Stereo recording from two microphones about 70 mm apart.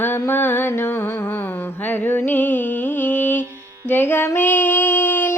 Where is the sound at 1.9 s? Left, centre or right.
Left.